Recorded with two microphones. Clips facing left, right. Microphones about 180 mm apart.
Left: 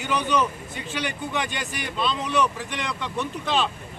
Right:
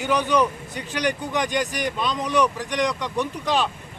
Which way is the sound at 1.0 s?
15° right (ahead or behind).